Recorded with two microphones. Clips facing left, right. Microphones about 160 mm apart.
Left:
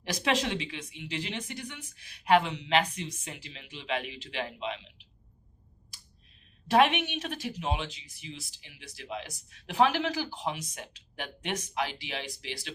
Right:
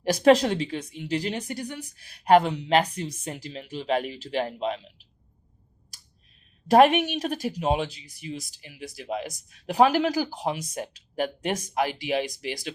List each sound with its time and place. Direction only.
0.0 s speech: 40° right (ahead or behind)
6.7 s speech: 40° right (ahead or behind)